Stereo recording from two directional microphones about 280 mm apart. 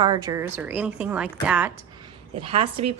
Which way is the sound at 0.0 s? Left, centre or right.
Centre.